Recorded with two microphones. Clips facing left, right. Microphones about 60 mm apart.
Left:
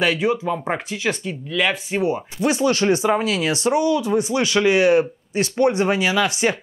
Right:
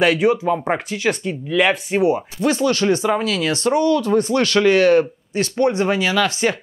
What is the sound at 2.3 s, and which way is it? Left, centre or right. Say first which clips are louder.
Speech: right 1 dB; centre.